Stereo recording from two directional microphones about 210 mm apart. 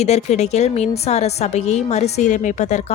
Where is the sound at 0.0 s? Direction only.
30° left (ahead or behind).